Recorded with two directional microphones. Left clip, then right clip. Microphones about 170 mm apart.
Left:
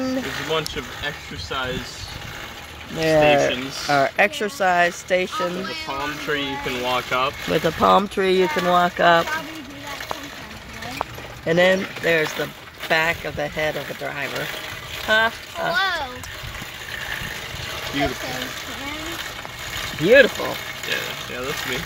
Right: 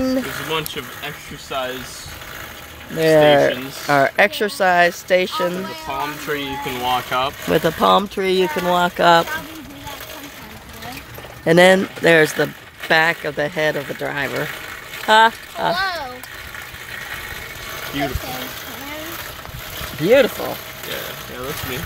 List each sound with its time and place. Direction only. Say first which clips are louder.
0.0 s speech: right 3 dB; 80° right; by 1.7 s 65° right (ahead or behind)
3.0 s speech: right 4 dB; 65° right (ahead or behind)
7.8 s speech: left 1 dB; 20° right (ahead or behind)
8.9 s speech: right 3 dB; 45° right (ahead or behind)
11.4 s speech: right 5 dB; 90° right
12.9 s speech: right 4 dB; 60° right (ahead or behind)
15.0 s speech: right 6 dB; 90° right
20.0 s speech: even; 55° right (ahead or behind)